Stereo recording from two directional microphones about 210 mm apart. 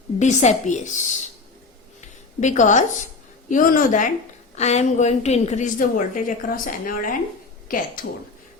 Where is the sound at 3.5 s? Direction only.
40° left (ahead or behind).